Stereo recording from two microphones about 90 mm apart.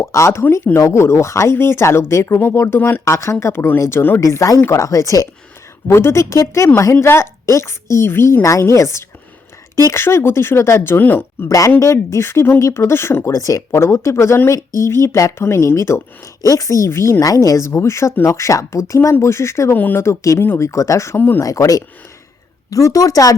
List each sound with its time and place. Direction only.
0.0 s speech: 30° left (ahead or behind)
4.2 s speech: 35° left (ahead or behind)
11.4 s speech: 40° left (ahead or behind)
21.2 s speech: 20° left (ahead or behind)
21.4 s speech: 40° left (ahead or behind)